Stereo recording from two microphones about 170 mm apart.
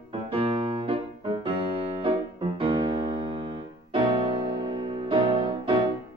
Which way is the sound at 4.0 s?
30° right (ahead or behind).